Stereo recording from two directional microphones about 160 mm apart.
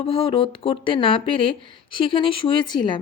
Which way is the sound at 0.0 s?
35° left (ahead or behind).